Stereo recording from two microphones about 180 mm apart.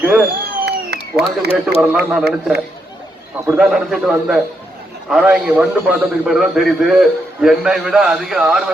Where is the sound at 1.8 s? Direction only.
5° right (ahead or behind).